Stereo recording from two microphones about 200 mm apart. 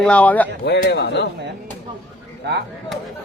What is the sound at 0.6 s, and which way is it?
Speech, 60° left (ahead or behind).